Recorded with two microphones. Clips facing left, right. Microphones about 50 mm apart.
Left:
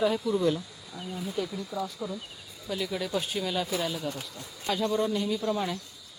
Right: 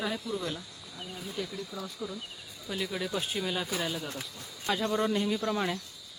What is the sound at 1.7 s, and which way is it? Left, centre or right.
Speech, left.